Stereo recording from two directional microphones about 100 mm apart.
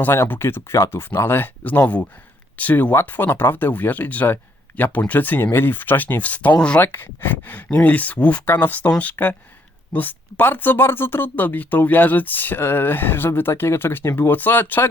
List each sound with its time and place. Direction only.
0.0 s speech: 20° left (ahead or behind)